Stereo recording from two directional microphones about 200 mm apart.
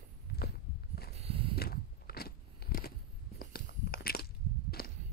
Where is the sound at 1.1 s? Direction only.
30° right (ahead or behind).